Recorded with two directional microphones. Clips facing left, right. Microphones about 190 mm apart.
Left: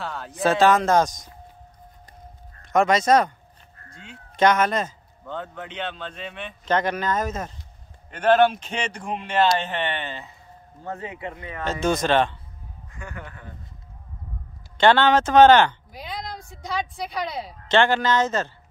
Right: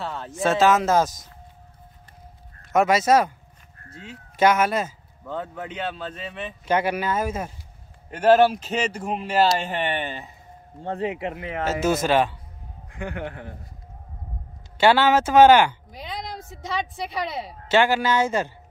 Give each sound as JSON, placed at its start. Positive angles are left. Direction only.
{"t": 0.0, "sound": "speech", "side_deg": 0}
{"t": 2.7, "sound": "a man's voice", "side_deg": -5}
{"t": 4.4, "sound": "a man's voice", "side_deg": -5}
{"t": 11.1, "sound": "speech", "side_deg": -75}
{"t": 11.6, "sound": "speech", "side_deg": -5}
{"t": 12.9, "sound": "speech", "side_deg": -60}
{"t": 14.8, "sound": "a man's voice", "side_deg": -10}